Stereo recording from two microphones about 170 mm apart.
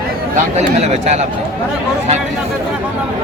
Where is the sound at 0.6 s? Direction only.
40° right (ahead or behind).